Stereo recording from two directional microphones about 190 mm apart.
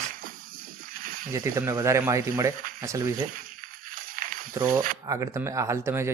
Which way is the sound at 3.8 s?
50° right (ahead or behind).